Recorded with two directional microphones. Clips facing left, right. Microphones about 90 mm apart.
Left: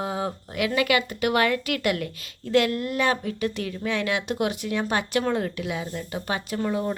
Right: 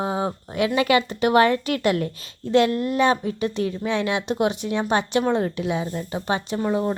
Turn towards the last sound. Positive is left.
turn(degrees=-25)  # may be behind; listen again after turning